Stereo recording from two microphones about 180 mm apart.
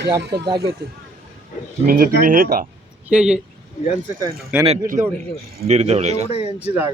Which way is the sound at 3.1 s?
5° right (ahead or behind).